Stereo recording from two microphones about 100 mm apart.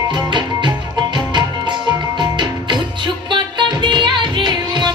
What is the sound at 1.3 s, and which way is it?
Music, 50° right (ahead or behind).